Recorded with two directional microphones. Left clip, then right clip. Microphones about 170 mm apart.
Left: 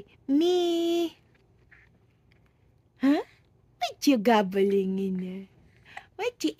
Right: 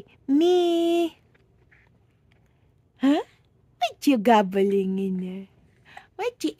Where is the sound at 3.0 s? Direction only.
15° right (ahead or behind).